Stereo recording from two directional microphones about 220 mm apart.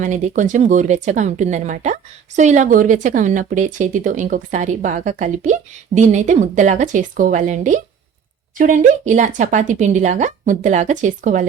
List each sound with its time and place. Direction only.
0.0 s speech: 35° right (ahead or behind)